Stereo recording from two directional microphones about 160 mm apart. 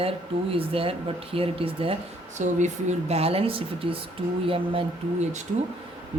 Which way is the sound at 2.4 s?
50° right (ahead or behind).